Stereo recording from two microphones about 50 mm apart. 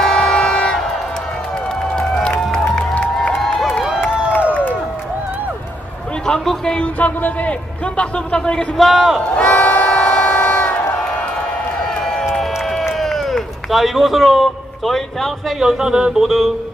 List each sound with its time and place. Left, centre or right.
0.0 s music: centre
2.0 s music: centre
3.4 s crowd: centre
4.5 s crowd: left
6.2 s a sound: centre
7.0 s speech: left
7.9 s a man's voice: left
8.8 s a man's voice: centre
9.3 s crowd: left
12.3 s a sound: centre
15.6 s speech: centre
16.2 s a man's voice: centre